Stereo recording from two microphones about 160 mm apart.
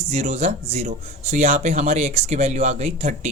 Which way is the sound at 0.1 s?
45° right (ahead or behind).